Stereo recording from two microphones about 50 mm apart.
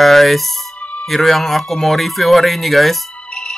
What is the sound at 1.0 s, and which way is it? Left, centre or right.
A man's voice, centre.